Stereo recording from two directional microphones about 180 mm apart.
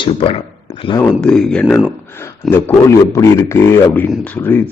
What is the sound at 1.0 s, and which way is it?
A man's voice, 5° left (ahead or behind).